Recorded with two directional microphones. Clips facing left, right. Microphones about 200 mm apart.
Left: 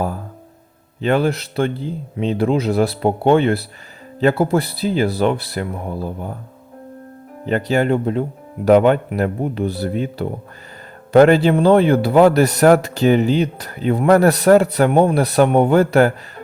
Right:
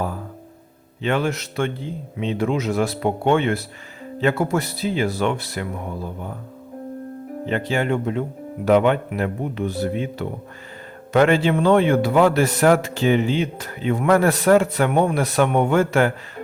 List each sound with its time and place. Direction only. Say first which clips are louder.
1.0 s a man's voice: left 5 dB; 35° left (ahead or behind)
7.4 s a man's voice: left 5 dB; 40° left (ahead or behind)